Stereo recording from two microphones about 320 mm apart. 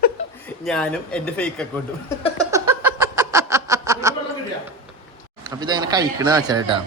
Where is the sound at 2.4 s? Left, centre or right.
Centre.